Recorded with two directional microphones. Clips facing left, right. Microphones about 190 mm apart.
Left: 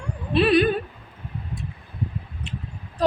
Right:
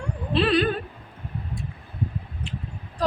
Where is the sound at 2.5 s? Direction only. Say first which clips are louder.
Left 1 dB; 20° left (ahead or behind).